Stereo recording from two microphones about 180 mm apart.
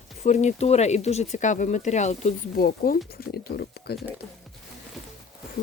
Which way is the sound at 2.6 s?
55° left (ahead or behind).